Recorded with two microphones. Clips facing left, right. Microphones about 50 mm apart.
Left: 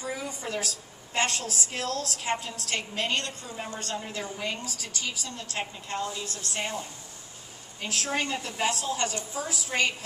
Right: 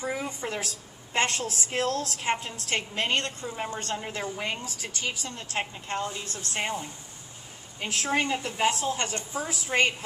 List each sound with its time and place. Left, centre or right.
0.0 s a woman's voice: right
7.8 s a woman's voice: right